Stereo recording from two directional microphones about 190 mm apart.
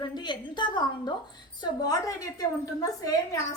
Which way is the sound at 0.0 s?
25° left (ahead or behind).